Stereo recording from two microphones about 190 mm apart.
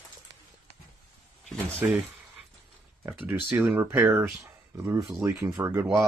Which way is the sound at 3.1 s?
10° right (ahead or behind).